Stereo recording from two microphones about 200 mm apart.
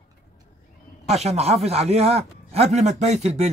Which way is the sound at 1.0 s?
35° right (ahead or behind).